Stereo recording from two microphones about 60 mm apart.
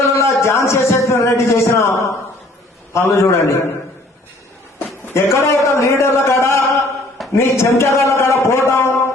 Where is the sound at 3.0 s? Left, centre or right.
Left.